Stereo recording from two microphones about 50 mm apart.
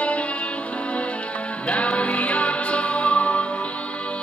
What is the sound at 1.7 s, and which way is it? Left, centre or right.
Music, left.